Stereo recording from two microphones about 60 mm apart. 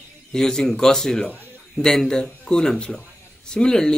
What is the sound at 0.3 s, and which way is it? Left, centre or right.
Speech, centre.